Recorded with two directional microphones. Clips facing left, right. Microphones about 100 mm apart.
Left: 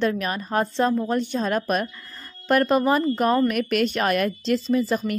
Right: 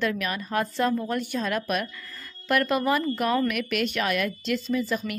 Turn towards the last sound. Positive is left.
turn(degrees=35)  # may be behind; listen again after turning